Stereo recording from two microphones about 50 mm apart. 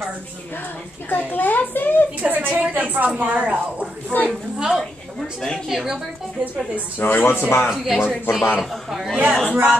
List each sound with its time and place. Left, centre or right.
1.1 s a woman's voice: left
2.2 s a sound: right
2.7 s a woman's voice: right
4.1 s a woman's voice: left
4.6 s speech: centre
6.4 s a woman's voice: right
7.0 s speech: left
7.7 s a man's voice: centre
9.5 s a woman's voice: right